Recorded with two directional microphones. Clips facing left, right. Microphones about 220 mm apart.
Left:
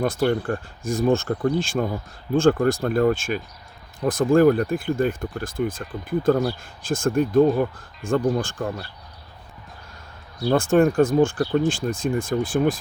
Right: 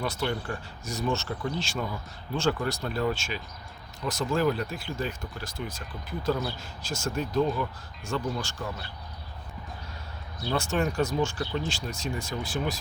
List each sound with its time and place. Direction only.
0.0 s speech: 50° left (ahead or behind)
10.4 s speech: 50° left (ahead or behind)